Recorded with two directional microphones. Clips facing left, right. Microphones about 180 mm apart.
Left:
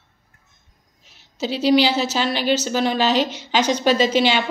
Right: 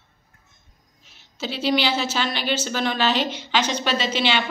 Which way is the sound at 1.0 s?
40° left (ahead or behind).